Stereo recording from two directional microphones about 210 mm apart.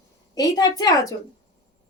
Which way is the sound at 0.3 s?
15° left (ahead or behind).